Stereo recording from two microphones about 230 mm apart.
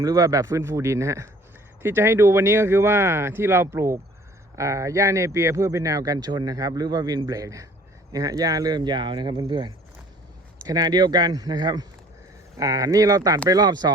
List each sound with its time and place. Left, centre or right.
0.0 s speech: centre